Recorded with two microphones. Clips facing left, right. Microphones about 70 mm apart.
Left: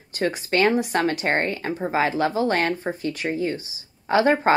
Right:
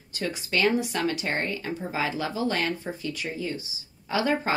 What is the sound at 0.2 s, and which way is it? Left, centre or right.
Speech, left.